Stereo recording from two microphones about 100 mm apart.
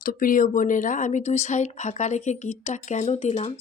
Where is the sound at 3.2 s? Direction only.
70° left (ahead or behind).